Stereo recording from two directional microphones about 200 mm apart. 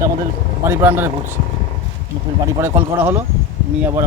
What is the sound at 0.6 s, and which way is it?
Speech, 10° right (ahead or behind).